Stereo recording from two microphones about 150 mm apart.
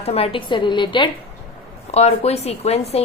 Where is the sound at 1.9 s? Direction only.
45° left (ahead or behind).